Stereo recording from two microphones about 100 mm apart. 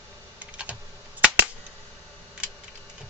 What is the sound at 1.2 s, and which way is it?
Cap gun, 15° right (ahead or behind).